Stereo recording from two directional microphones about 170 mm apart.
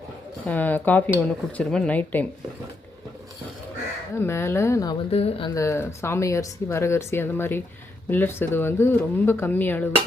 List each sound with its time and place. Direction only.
0.4 s speech: 10° left (ahead or behind)
4.2 s speech: 15° left (ahead or behind)
5.1 s speech: 35° left (ahead or behind)
5.5 s speech: 15° left (ahead or behind)